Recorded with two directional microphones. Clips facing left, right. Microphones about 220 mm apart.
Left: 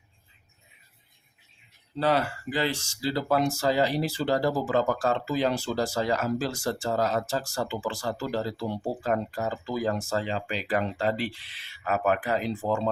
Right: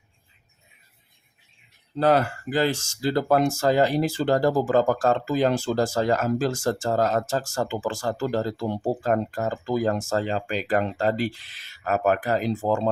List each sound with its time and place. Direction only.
2.0 s speech: 45° right (ahead or behind)